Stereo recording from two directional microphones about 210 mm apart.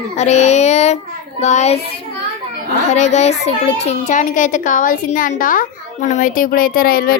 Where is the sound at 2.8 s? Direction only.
35° left (ahead or behind).